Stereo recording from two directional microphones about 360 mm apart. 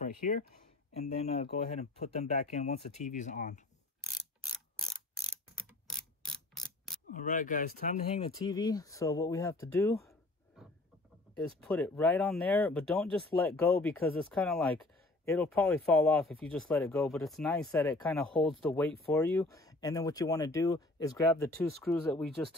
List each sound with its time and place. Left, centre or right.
0.0 s speech: left
5.9 s mechanisms: centre
7.2 s speech: left; by 22.6 s centre